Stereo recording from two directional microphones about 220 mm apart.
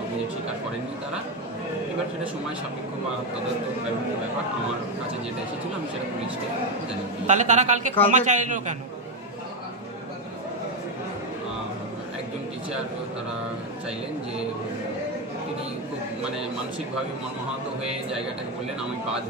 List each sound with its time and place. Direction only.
7.2 s a woman's voice: 35° right (ahead or behind)